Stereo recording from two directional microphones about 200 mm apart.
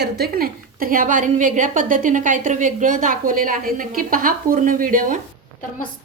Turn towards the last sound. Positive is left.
turn(degrees=-45)  # may be behind; listen again after turning